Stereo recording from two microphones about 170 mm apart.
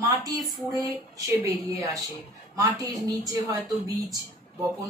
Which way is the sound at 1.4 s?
20° right (ahead or behind).